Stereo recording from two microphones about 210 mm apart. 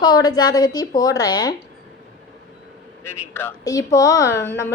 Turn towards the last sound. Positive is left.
turn(degrees=10)  # may be behind; listen again after turning